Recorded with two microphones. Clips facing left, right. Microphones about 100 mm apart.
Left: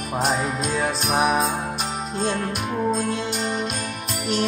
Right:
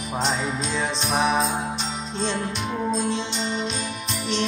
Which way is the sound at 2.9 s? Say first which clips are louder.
Left 1 dB; 50° left (ahead or behind).